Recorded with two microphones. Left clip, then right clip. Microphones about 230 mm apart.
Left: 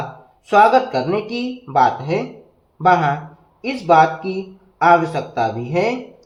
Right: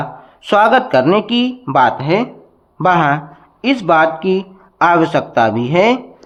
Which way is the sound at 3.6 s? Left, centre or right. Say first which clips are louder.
Right 1 dB; right.